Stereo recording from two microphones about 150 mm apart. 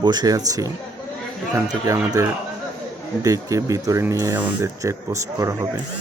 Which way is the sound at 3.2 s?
20° right (ahead or behind).